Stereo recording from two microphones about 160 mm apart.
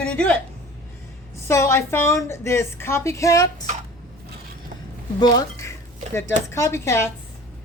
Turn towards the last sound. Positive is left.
turn(degrees=15)  # may be behind; listen again after turning